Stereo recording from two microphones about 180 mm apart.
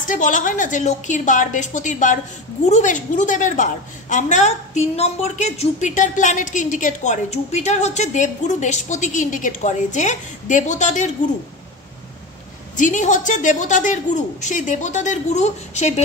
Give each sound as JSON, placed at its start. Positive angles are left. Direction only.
{"t": 0.0, "sound": "a woman's voice", "side_deg": 45}
{"t": 12.7, "sound": "a woman's voice", "side_deg": 45}